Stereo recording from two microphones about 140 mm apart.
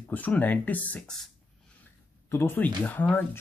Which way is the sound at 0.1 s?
10° left (ahead or behind).